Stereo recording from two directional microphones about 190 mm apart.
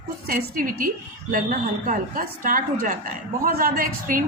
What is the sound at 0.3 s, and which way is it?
A woman's voice, 45° right (ahead or behind).